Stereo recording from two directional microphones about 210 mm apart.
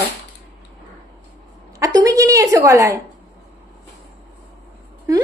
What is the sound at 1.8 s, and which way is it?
A woman's voice, 15° right (ahead or behind).